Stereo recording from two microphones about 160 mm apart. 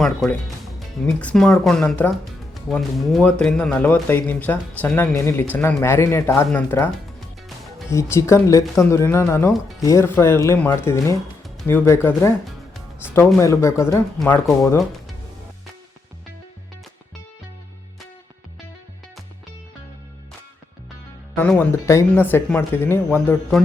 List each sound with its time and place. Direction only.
0.0 s speech: centre (ahead or behind)
13.4 s speech: 20° left (ahead or behind)
21.3 s speech: 10° left (ahead or behind)